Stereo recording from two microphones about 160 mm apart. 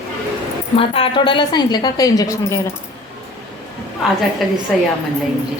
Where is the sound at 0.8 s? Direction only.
35° left (ahead or behind); by 2.6 s 20° left (ahead or behind).